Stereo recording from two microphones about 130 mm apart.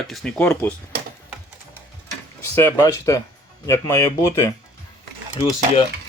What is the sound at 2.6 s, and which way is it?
Speech, 20° left (ahead or behind).